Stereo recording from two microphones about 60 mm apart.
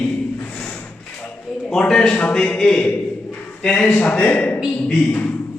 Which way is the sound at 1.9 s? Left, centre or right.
Centre.